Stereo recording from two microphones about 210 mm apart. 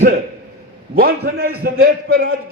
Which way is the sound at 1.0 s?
50° right (ahead or behind).